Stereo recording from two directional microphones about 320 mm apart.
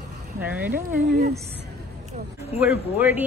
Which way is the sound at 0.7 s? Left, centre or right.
Right.